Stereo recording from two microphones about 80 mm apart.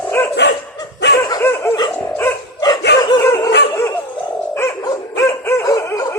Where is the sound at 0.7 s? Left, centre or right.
Left.